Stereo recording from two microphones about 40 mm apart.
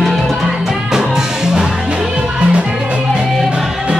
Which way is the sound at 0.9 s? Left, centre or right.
Centre.